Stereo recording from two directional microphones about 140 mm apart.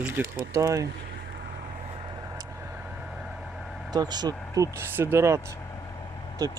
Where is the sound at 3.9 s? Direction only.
30° right (ahead or behind).